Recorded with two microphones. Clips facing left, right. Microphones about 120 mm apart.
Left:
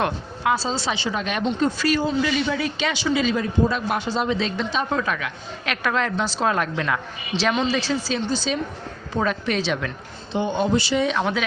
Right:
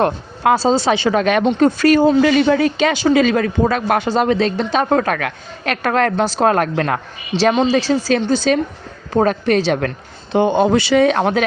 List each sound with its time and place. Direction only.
0.4 s speech: 50° right (ahead or behind)
5.6 s a woman's voice: 45° right (ahead or behind)
8.1 s speech: 55° right (ahead or behind)
9.1 s a woman's voice: 45° right (ahead or behind)
10.3 s speech: 60° right (ahead or behind)